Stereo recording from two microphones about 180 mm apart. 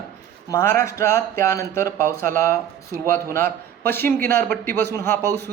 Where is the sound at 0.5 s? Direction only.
15° left (ahead or behind).